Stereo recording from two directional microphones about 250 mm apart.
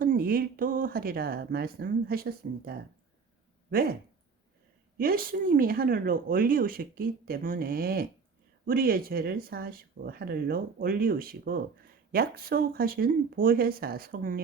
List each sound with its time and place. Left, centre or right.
0.0 s speech: right
4.9 s speech: right